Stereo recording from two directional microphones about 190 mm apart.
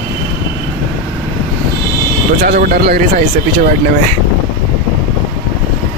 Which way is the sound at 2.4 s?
50° right (ahead or behind).